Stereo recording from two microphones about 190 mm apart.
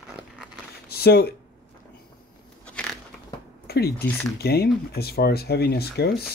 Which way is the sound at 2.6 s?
5° left (ahead or behind).